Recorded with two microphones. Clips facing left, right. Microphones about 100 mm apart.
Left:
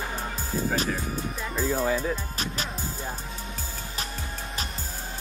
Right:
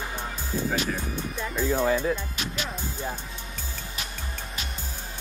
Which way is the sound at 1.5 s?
Centre (ahead or behind).